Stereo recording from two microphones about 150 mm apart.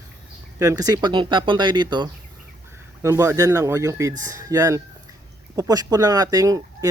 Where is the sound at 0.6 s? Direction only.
20° right (ahead or behind).